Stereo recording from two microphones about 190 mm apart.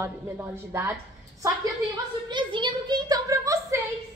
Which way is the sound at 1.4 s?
20° right (ahead or behind).